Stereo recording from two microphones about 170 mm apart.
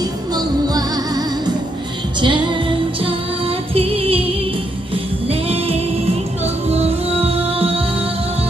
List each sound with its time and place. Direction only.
0.3 s music: 25° right (ahead or behind)
5.3 s music: 35° right (ahead or behind)